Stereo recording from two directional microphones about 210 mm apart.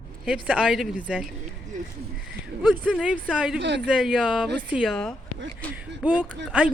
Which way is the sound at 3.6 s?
55° right (ahead or behind).